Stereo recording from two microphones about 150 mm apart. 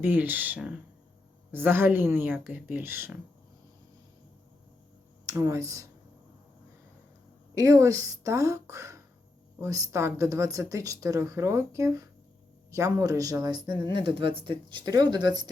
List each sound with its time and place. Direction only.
0.0 s speech: 10° right (ahead or behind)
5.2 s speech: 20° right (ahead or behind)
7.5 s speech: 20° right (ahead or behind)